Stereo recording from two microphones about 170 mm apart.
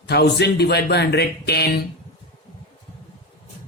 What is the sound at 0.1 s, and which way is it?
Speech, 70° left (ahead or behind).